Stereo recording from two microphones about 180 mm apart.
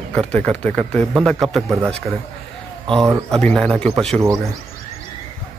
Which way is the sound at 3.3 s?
5° left (ahead or behind).